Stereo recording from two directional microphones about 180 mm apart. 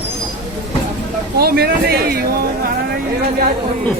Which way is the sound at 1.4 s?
60° right (ahead or behind).